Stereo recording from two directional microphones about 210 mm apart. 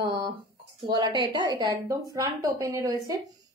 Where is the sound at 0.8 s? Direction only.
20° right (ahead or behind).